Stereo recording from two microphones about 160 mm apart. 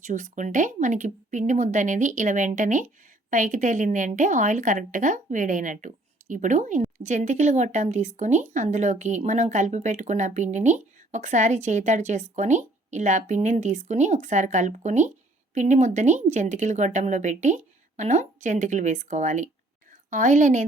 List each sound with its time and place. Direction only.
0.0 s speech: 50° right (ahead or behind)